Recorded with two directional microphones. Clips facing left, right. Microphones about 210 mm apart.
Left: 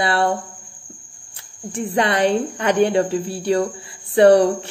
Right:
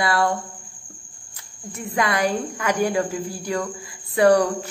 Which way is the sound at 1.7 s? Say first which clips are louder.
Left 4 dB; 30° left (ahead or behind).